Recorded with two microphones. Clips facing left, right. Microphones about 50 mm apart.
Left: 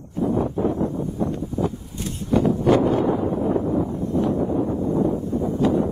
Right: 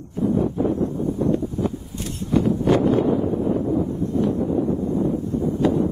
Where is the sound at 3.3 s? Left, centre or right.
Left.